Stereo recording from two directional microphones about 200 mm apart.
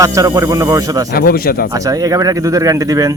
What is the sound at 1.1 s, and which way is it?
Speech, 50° left (ahead or behind).